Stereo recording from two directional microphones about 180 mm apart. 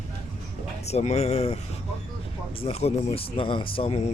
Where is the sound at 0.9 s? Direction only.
35° left (ahead or behind).